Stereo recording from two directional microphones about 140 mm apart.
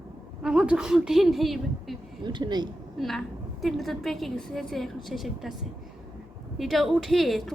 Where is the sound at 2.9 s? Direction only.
Centre (ahead or behind).